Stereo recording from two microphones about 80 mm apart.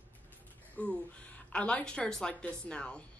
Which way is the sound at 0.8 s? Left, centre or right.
Centre.